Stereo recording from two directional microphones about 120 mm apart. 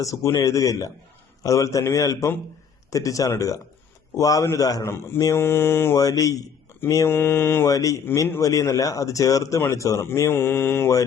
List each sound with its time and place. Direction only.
0.0 s speech: 25° left (ahead or behind)
6.0 s speech: 30° left (ahead or behind)